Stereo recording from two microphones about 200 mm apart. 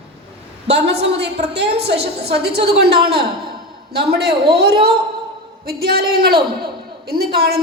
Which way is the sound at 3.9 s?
50° right (ahead or behind).